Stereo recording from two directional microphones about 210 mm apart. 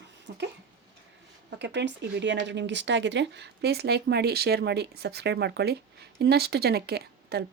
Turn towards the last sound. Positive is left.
turn(degrees=-50)  # may be behind; listen again after turning